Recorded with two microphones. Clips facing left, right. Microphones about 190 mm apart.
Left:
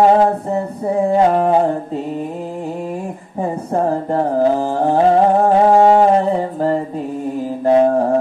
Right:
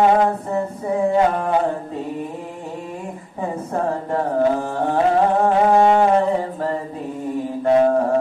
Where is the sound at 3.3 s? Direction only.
35° left (ahead or behind).